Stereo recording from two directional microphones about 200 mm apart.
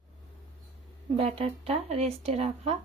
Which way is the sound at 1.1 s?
30° right (ahead or behind).